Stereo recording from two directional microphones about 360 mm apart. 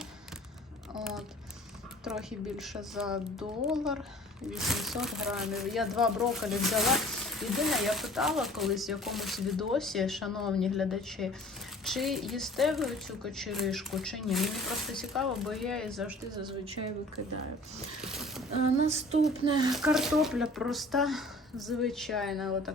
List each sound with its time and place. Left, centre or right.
2.0 s speech: centre
16.3 s a woman's voice: centre
18.0 s speech: centre
18.9 s a woman's voice: centre